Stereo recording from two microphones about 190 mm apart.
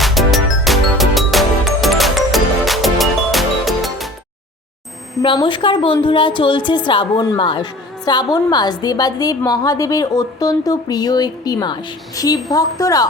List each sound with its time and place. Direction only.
0.0 s music: centre (ahead or behind)
5.2 s a woman's voice: 25° left (ahead or behind)